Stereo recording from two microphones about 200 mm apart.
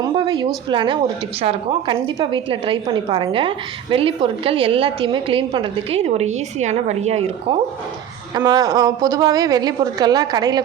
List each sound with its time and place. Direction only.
0.0 s a woman's voice: 20° right (ahead or behind)
8.4 s a woman's voice: 20° right (ahead or behind)